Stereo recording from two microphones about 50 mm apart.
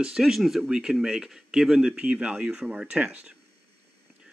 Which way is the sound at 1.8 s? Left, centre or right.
Right.